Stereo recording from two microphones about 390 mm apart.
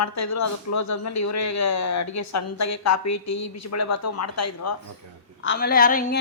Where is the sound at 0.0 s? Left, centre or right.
Left.